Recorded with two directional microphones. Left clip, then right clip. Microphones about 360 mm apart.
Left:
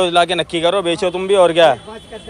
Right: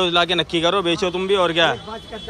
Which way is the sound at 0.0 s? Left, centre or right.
Centre.